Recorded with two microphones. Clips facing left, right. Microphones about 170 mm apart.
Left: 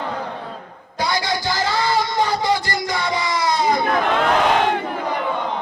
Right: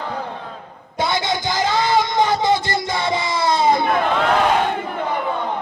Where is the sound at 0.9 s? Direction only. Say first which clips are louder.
Right 1 dB; 20° right (ahead or behind).